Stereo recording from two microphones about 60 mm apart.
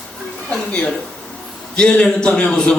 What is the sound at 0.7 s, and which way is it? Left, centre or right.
A man's voice, centre.